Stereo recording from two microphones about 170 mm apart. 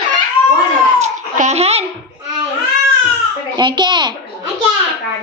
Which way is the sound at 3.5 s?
25° right (ahead or behind).